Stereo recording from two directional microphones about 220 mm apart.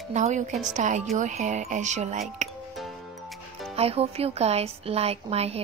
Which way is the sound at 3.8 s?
25° right (ahead or behind).